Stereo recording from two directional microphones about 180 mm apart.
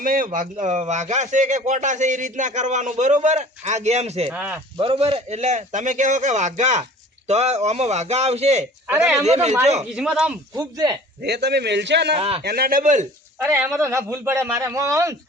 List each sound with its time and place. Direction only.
0.0 s a man's voice: 50° right (ahead or behind)
4.3 s a man's voice: 10° right (ahead or behind)
4.8 s a man's voice: 30° right (ahead or behind)
8.9 s a man's voice: 15° right (ahead or behind)
9.2 s a man's voice: 35° right (ahead or behind)
9.9 s speech: 5° right (ahead or behind)
10.6 s speech: 20° right (ahead or behind)
11.2 s a man's voice: 65° right (ahead or behind)
12.1 s a man's voice: 35° right (ahead or behind)
12.4 s speech: 60° right (ahead or behind); by 13.1 s 45° right (ahead or behind)
13.4 s a man's voice: 15° right (ahead or behind)